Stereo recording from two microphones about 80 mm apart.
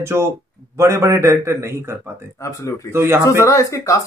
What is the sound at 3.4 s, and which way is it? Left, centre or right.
Speech, left.